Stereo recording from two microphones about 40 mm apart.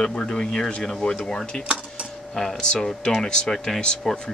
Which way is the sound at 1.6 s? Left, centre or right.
Right.